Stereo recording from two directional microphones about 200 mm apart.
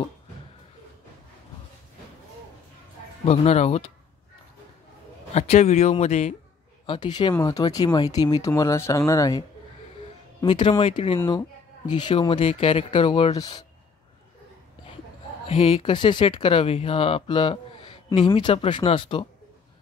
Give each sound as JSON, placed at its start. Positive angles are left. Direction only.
{"t": 3.3, "sound": "speech", "side_deg": 30}
{"t": 5.3, "sound": "speech", "side_deg": 35}
{"t": 6.9, "sound": "speech", "side_deg": 20}
{"t": 10.4, "sound": "speech", "side_deg": 25}
{"t": 15.4, "sound": "speech", "side_deg": 30}